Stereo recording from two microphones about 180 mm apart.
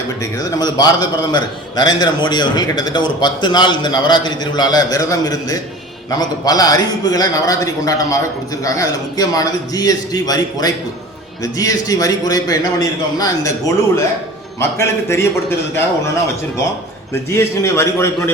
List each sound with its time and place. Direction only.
0.6 s a man's voice: 25° left (ahead or behind)
17.3 s a man's voice: 15° left (ahead or behind)